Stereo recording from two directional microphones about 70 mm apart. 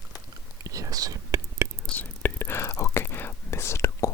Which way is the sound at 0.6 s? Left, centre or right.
Right.